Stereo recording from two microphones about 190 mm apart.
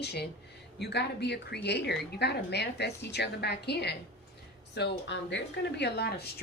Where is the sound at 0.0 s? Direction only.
60° left (ahead or behind).